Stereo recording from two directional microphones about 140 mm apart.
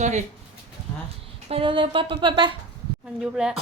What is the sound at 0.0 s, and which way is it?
Speech, 60° right (ahead or behind).